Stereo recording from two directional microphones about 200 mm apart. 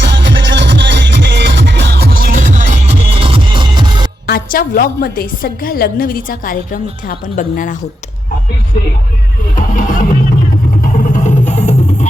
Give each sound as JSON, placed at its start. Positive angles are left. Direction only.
{"t": 0.0, "sound": "music", "side_deg": -60}
{"t": 4.3, "sound": "a woman's voice", "side_deg": 45}
{"t": 9.6, "sound": "music", "side_deg": 40}